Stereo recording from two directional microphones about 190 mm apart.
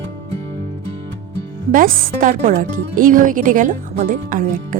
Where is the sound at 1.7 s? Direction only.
45° right (ahead or behind).